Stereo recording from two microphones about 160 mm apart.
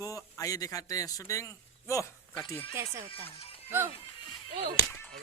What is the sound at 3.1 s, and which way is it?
Speech, 35° left (ahead or behind).